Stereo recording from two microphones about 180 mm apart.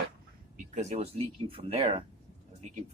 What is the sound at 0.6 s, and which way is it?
Speech, 40° right (ahead or behind).